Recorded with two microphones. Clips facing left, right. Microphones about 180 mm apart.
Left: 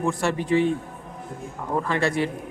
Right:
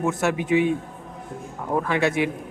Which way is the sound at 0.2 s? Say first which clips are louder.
Right 1 dB; 5° right (ahead or behind).